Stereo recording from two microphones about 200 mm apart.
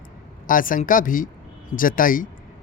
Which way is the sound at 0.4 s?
45° left (ahead or behind).